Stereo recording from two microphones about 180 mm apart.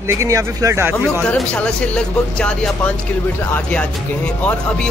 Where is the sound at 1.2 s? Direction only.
5° left (ahead or behind).